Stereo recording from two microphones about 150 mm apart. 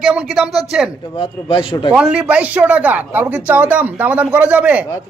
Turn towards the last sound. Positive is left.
turn(degrees=-10)  # may be behind; listen again after turning